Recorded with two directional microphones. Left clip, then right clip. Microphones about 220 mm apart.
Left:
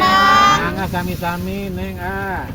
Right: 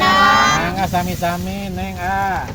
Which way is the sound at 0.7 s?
45° right (ahead or behind).